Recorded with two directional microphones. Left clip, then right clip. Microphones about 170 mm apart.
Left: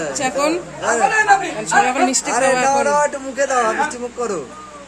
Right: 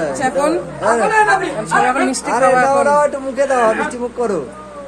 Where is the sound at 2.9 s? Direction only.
5° right (ahead or behind).